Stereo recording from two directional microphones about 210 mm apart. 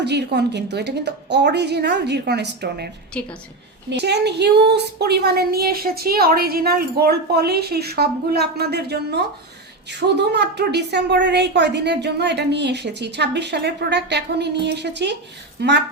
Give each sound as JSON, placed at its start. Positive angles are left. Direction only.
{"t": 0.0, "sound": "a woman's voice", "side_deg": -55}
{"t": 3.1, "sound": "a woman's voice", "side_deg": 5}
{"t": 3.8, "sound": "a woman's voice", "side_deg": -50}